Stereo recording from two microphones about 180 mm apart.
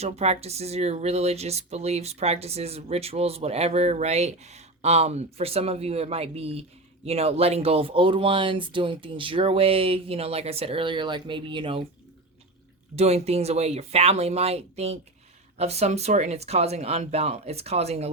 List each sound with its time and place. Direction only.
0.0 s speech: 35° right (ahead or behind)
13.0 s speech: 35° right (ahead or behind)